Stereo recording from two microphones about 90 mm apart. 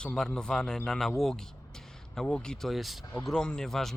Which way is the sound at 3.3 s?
10° left (ahead or behind).